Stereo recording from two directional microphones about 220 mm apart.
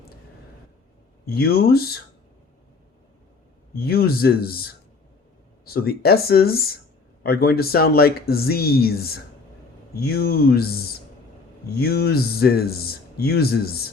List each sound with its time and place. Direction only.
1.2 s a man's voice: 45° left (ahead or behind)
3.8 s a man's voice: 45° left (ahead or behind)